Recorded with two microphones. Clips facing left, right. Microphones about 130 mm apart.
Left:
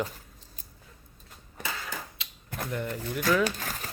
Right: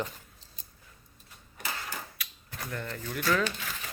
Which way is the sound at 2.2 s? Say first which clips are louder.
Right 2 dB; 25° left (ahead or behind).